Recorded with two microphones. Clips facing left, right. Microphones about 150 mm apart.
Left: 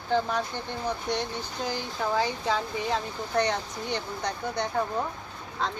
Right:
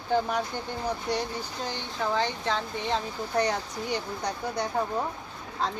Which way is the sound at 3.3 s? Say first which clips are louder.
Even; 5° right (ahead or behind).